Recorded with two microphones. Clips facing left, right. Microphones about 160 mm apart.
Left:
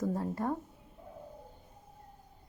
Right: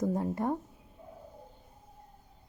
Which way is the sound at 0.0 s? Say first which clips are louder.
Right 3 dB; 15° right (ahead or behind).